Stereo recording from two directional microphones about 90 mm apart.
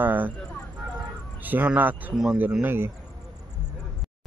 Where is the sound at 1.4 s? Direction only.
20° right (ahead or behind).